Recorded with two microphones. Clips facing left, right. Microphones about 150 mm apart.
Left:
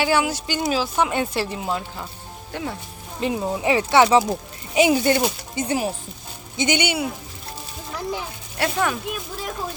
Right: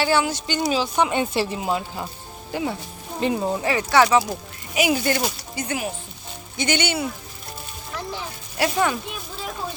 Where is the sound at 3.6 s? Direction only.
25° left (ahead or behind).